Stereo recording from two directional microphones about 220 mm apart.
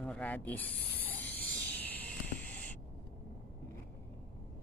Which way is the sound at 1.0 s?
10° left (ahead or behind).